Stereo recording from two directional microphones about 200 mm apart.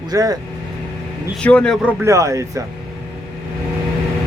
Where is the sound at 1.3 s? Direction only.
5° left (ahead or behind).